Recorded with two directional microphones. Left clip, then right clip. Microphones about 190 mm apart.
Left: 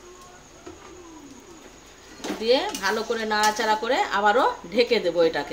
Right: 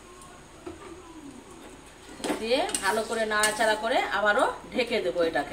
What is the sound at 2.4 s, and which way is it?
Speech, 50° left (ahead or behind).